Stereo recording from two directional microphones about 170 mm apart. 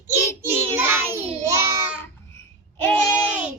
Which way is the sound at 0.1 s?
15° right (ahead or behind).